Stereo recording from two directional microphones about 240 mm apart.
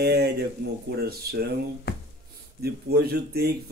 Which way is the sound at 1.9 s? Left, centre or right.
Left.